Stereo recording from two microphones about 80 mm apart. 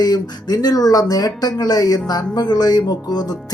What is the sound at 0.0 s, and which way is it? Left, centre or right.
Speech, left.